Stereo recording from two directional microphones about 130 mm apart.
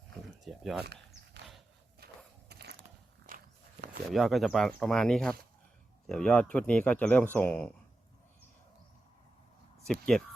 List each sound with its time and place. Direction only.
0.4 s speech: centre (ahead or behind)
3.3 s walk: 90° right
4.1 s speech: centre (ahead or behind); by 7.7 s 15° left (ahead or behind)
9.8 s speech: 5° left (ahead or behind)